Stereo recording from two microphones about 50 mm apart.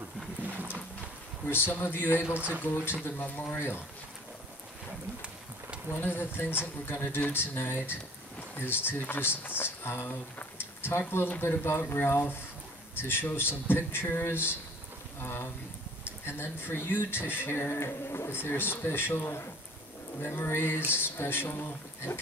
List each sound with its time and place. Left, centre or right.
0.4 s horse: right
1.5 s speech: left
2.3 s speech: right
2.6 s speech: left
5.9 s speech: left
11.4 s speech: left